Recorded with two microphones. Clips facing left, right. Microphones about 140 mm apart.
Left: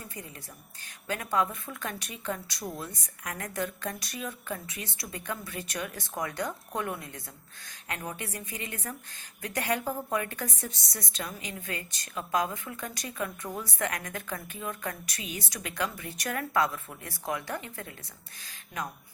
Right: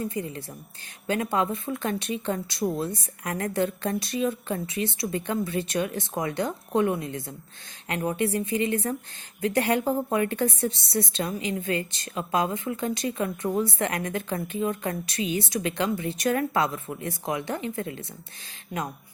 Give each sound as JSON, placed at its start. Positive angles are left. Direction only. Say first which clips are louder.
{"t": 0.1, "sound": "a woman's voice", "louder": "right 11 dB", "side_deg": -30}